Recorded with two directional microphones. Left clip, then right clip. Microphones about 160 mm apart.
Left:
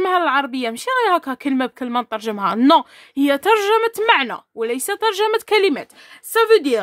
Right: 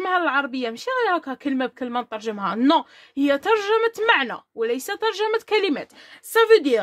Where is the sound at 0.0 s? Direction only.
30° left (ahead or behind).